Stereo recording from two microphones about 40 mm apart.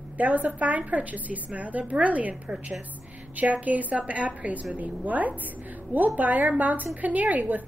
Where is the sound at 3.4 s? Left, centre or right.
Right.